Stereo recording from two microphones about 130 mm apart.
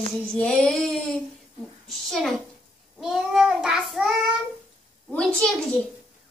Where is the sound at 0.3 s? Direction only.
5° left (ahead or behind).